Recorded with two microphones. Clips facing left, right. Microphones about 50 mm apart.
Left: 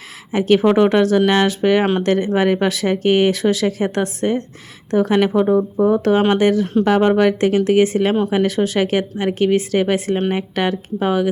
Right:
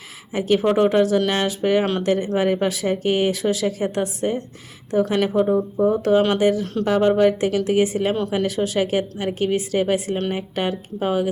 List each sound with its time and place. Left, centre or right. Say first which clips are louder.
0.3 s speech: left 5 dB; left
1.8 s speech: left 4 dB; left
2.0 s speech: left 3 dB; left
5.5 s speech: left 3 dB; left
5.9 s speech: left 2 dB; left